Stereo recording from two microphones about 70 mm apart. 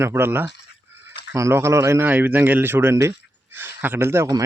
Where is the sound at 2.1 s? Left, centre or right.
Right.